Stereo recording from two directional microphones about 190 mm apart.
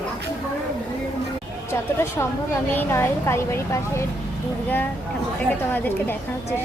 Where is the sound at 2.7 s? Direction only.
10° left (ahead or behind).